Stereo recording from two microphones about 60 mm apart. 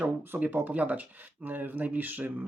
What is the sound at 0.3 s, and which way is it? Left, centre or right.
Speech, right.